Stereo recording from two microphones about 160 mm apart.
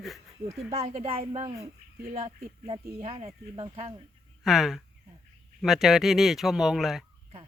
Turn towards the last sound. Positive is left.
turn(degrees=0)  # may be behind; listen again after turning